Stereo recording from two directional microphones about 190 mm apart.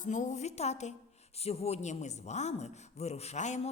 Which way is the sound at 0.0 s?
40° left (ahead or behind).